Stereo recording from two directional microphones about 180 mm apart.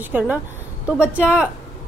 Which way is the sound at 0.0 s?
10° right (ahead or behind).